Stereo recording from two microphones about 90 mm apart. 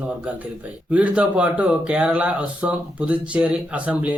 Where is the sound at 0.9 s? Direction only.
15° right (ahead or behind).